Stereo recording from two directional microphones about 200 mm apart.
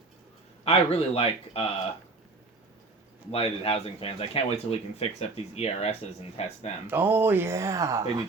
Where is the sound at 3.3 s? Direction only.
30° left (ahead or behind).